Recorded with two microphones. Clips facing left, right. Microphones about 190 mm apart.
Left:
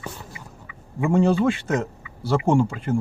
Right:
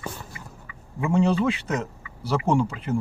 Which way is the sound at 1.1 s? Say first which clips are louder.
Left 3 dB; 50° left (ahead or behind).